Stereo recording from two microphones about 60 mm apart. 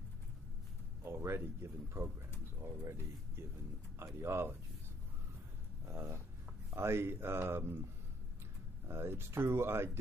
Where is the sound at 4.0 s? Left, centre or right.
Right.